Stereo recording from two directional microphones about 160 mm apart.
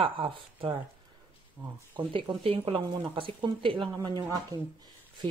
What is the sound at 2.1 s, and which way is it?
A woman's voice, 35° right (ahead or behind).